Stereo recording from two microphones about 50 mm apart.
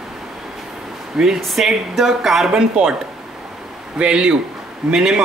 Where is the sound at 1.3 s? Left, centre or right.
Centre.